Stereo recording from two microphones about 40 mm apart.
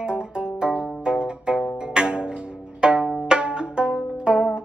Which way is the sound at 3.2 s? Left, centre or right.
Right.